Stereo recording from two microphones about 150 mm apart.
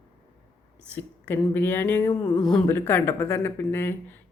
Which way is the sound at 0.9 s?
15° left (ahead or behind).